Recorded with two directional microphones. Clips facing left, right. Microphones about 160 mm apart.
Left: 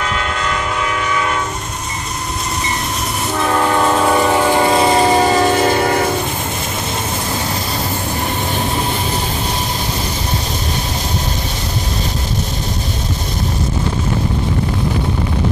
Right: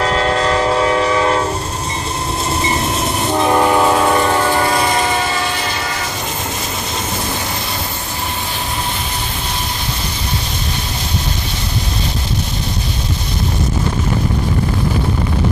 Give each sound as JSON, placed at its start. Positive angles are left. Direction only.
{"t": 0.0, "sound": "train", "side_deg": -35}
{"t": 3.3, "sound": "train", "side_deg": -15}
{"t": 4.1, "sound": "train", "side_deg": 5}